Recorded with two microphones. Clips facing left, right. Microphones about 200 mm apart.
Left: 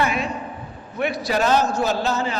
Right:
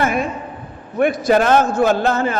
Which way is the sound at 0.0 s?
50° right (ahead or behind).